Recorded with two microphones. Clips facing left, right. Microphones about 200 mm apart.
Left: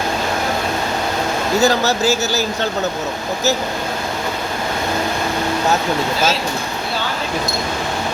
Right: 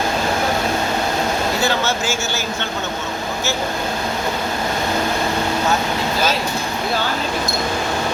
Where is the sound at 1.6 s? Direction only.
40° left (ahead or behind).